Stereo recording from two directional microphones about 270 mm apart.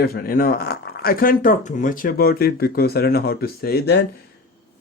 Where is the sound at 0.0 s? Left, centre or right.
Left.